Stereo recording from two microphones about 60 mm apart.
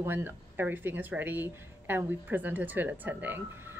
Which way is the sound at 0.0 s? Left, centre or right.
Right.